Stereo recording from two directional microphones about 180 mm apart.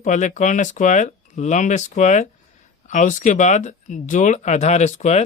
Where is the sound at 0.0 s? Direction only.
45° left (ahead or behind).